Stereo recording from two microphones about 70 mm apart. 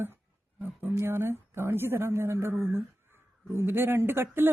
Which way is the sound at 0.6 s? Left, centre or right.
Right.